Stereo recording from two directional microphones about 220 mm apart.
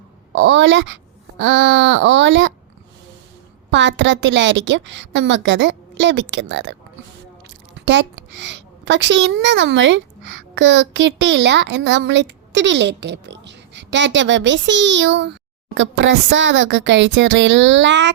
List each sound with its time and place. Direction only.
0.3 s a woman's voice: 55° right (ahead or behind)
3.7 s a woman's voice: 55° right (ahead or behind)
7.9 s a woman's voice: 55° right (ahead or behind)